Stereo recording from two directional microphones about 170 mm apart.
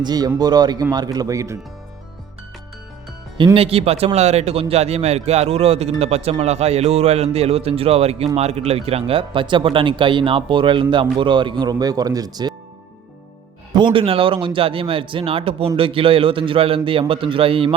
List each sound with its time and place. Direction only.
0.0 s a man's voice: 25° right (ahead or behind)
3.3 s a man's voice: 30° right (ahead or behind)
13.7 s speech: 30° right (ahead or behind)